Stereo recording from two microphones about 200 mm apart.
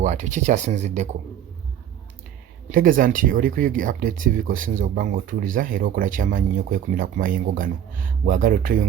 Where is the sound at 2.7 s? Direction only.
45° right (ahead or behind).